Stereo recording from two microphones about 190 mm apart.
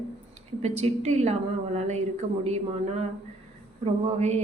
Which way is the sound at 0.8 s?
35° right (ahead or behind).